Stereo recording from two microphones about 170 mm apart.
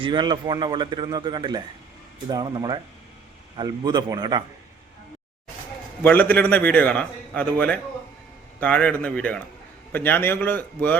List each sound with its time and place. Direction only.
0.0 s speech: 25° right (ahead or behind)
6.0 s a man's voice: 10° left (ahead or behind)